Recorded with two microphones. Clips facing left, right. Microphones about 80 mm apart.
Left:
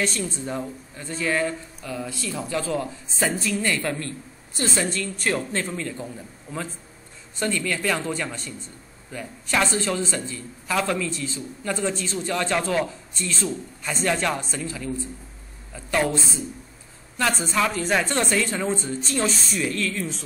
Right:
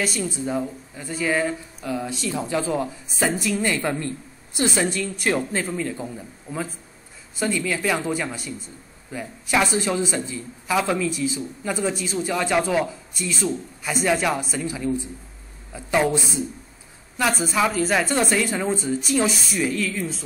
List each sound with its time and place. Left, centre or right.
0.0 s a woman's voice: centre
5.6 s speech: centre
5.9 s speech: centre